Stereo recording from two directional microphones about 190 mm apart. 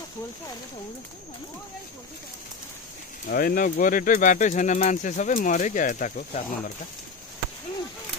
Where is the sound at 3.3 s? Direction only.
50° left (ahead or behind).